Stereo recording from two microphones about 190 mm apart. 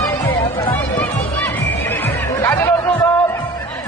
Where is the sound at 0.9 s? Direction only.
10° left (ahead or behind).